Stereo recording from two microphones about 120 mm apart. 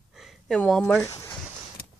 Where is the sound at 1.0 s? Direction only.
25° left (ahead or behind).